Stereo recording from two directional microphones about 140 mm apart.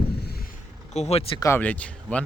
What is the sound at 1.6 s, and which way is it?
Speech, 10° left (ahead or behind).